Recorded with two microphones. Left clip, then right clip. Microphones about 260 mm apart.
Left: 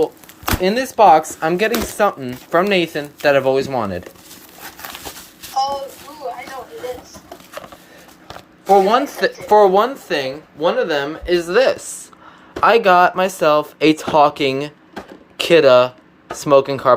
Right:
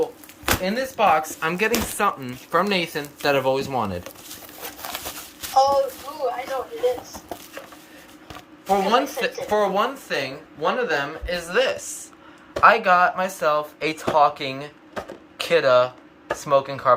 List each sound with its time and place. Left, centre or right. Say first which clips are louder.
0.6 s speech: left 10 dB; left; by 4.0 s centre
8.6 s speech: left 7 dB; centre